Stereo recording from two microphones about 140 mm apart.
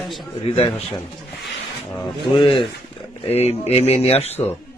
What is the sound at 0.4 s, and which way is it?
Speech, 45° left (ahead or behind).